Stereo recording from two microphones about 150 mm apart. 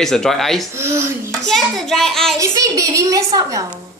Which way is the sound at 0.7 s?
20° right (ahead or behind).